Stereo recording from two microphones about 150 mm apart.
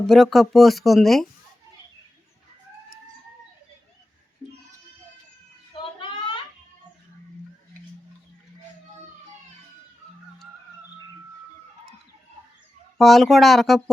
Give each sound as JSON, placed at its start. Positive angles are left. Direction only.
{"t": 0.1, "sound": "speech", "side_deg": 0}
{"t": 5.7, "sound": "a sound", "side_deg": 35}
{"t": 13.0, "sound": "speech", "side_deg": 0}